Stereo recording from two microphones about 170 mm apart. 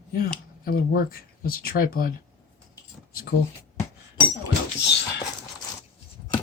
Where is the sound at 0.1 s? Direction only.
60° left (ahead or behind).